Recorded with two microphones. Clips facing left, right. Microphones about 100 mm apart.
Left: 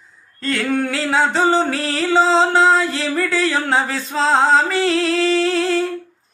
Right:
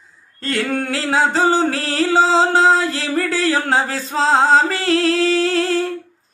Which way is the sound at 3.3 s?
40° right (ahead or behind).